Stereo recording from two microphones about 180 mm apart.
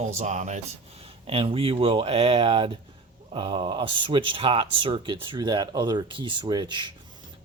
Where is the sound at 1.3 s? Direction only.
30° right (ahead or behind).